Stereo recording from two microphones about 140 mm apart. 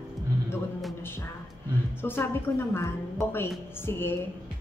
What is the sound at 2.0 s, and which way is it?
A woman's voice, 15° left (ahead or behind).